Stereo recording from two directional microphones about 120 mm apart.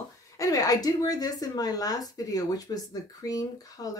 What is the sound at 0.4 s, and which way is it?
Speech, 30° left (ahead or behind).